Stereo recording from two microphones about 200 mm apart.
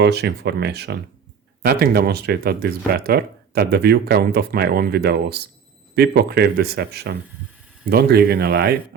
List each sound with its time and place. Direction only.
0.0 s speech: 55° right (ahead or behind)